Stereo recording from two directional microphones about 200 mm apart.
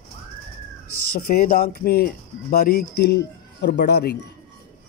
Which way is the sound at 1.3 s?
45° left (ahead or behind).